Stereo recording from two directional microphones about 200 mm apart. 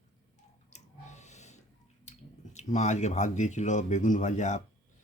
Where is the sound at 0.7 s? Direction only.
35° left (ahead or behind).